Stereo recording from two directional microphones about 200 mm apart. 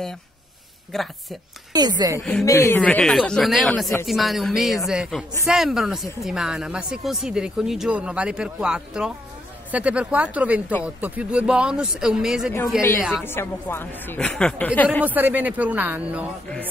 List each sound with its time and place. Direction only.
0.9 s speech: centre (ahead or behind)
1.7 s speech: 20° right (ahead or behind)
2.1 s speech: 5° left (ahead or behind)
2.4 s speech: 15° left (ahead or behind); by 12.9 s 5° right (ahead or behind)
13.2 s speech: 10° left (ahead or behind)
15.0 s speech: 10° right (ahead or behind)